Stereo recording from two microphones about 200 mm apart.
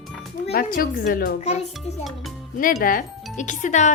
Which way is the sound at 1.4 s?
35° left (ahead or behind).